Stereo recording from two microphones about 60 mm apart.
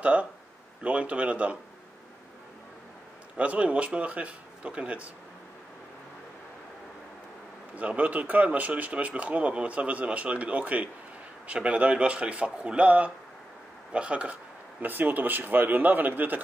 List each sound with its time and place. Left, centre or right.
0.0 s a man's voice: right
3.3 s a man's voice: right
7.7 s a man's voice: right
14.8 s a man's voice: right